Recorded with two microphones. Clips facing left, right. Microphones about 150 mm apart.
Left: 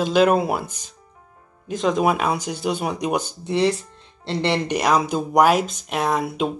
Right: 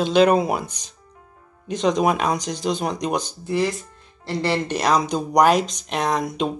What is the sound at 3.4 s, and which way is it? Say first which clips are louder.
Speech: left 4 dB; 25° left (ahead or behind).